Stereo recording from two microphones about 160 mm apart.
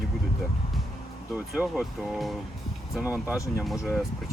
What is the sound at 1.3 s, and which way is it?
Speech, 5° right (ahead or behind).